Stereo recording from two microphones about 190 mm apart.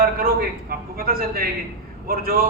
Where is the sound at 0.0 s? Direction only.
50° right (ahead or behind).